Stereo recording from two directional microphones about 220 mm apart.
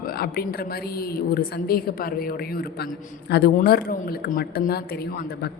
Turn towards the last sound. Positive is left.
turn(degrees=45)  # may be behind; listen again after turning